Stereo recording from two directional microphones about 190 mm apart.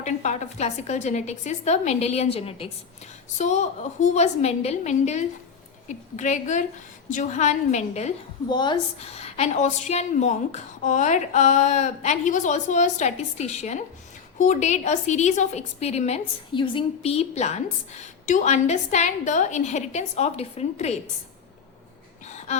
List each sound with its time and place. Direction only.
0.0 s a woman's voice: 40° left (ahead or behind)
8.4 s a woman's voice: 25° left (ahead or behind)